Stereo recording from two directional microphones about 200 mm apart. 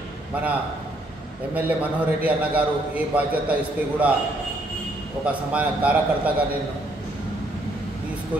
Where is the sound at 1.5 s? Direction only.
10° right (ahead or behind).